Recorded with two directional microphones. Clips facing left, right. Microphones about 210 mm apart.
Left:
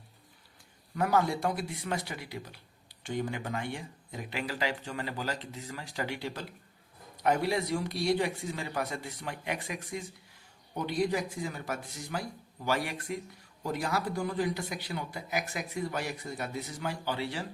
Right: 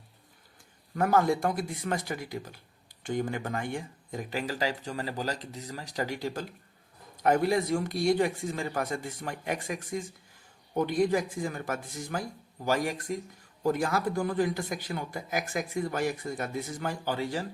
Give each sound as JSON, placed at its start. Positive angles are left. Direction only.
{"t": 0.9, "sound": "a man's voice", "side_deg": -50}